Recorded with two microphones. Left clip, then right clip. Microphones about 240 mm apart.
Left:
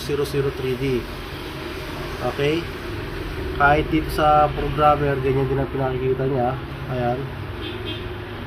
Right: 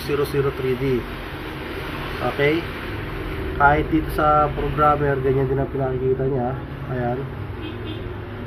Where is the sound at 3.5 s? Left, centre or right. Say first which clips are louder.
Right 1 dB; centre.